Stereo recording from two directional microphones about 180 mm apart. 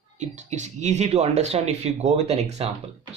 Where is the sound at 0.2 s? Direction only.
40° right (ahead or behind).